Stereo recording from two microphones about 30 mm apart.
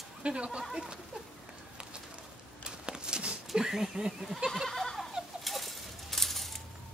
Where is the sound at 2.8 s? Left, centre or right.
Right.